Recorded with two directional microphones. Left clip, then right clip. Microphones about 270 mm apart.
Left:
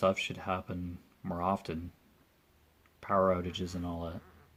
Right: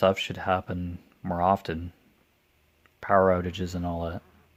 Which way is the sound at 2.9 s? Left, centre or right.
Right.